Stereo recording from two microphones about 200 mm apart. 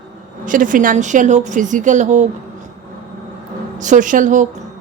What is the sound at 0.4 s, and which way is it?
Speech, 40° right (ahead or behind).